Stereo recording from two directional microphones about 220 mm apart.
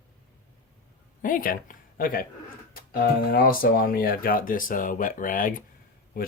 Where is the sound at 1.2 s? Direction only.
40° left (ahead or behind).